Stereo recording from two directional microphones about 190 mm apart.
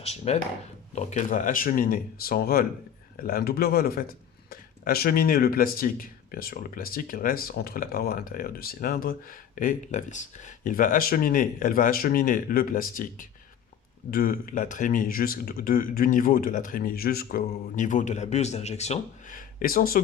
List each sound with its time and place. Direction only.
0.0 s speech: 35° left (ahead or behind); by 20.0 s 50° left (ahead or behind)